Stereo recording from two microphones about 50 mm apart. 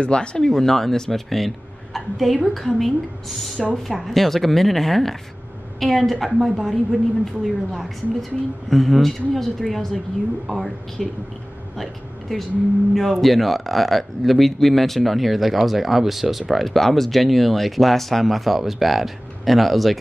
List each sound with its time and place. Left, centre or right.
0.0 s speech: centre
0.5 s speech: centre